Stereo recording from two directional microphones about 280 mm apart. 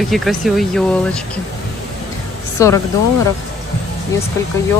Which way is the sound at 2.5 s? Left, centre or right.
Centre.